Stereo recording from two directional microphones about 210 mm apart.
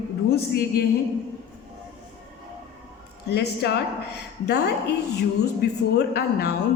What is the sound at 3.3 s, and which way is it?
A woman's voice, 50° left (ahead or behind).